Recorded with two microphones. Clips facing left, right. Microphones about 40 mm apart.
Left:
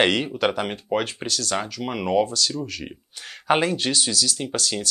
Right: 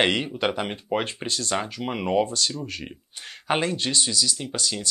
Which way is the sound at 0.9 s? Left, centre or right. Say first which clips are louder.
Left 2 dB; right.